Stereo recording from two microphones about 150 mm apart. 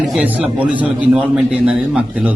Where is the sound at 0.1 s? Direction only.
5° right (ahead or behind).